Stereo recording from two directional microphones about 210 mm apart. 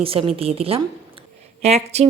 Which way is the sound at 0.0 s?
25° right (ahead or behind).